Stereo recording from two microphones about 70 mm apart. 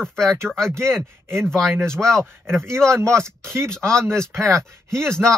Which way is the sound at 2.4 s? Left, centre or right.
Right.